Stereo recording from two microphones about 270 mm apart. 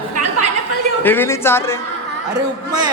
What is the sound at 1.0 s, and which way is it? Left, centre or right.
Speech, centre.